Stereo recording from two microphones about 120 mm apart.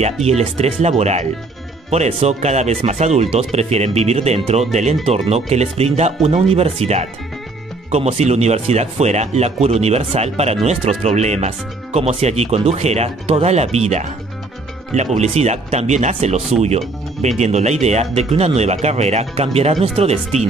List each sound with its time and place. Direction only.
0.0 s speech: 60° right (ahead or behind)
15.1 s speech: 65° right (ahead or behind)